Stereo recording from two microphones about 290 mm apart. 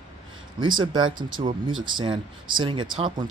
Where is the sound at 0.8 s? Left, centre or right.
Centre.